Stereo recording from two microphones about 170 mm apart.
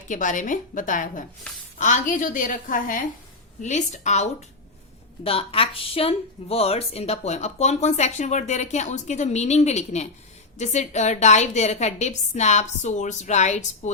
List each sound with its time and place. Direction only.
0.1 s a woman's voice: 50° left (ahead or behind)